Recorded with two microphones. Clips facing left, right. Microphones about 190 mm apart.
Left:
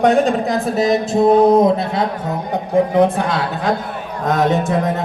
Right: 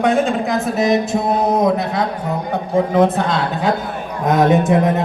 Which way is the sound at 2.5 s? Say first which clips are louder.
Left 1 dB; 15° left (ahead or behind).